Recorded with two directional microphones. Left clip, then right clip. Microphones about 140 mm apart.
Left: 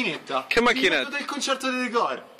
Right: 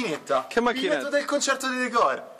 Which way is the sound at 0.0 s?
35° right (ahead or behind).